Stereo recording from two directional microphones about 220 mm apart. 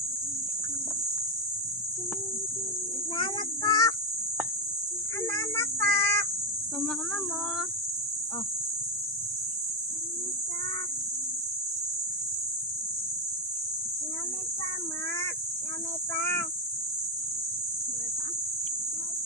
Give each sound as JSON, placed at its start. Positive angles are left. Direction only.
{"t": 3.2, "sound": "child singing", "side_deg": 20}
{"t": 5.3, "sound": "child singing", "side_deg": 15}